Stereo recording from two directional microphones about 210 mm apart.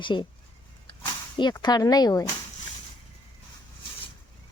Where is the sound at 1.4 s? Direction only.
20° left (ahead or behind).